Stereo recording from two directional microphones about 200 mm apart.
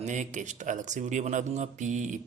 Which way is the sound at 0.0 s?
35° right (ahead or behind).